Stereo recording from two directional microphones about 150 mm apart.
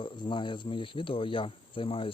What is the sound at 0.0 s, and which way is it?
Speech, 35° left (ahead or behind).